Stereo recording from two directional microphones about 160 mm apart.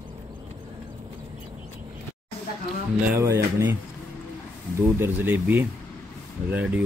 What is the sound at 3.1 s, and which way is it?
Speech, 20° right (ahead or behind).